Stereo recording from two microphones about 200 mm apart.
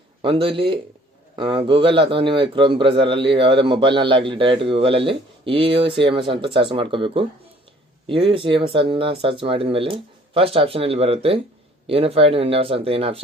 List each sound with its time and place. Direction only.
0.2 s a man's voice: 25° right (ahead or behind)